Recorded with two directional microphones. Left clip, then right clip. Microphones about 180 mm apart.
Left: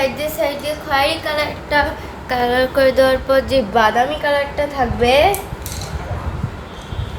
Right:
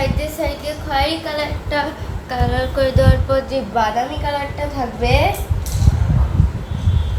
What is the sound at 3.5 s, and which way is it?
Speech, 50° left (ahead or behind).